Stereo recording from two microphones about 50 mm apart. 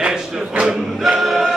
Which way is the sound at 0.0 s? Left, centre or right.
Centre.